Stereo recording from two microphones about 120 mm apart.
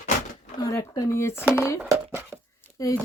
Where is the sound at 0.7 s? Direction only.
25° left (ahead or behind).